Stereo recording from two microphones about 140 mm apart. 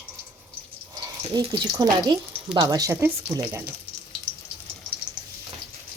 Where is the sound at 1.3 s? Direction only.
30° right (ahead or behind).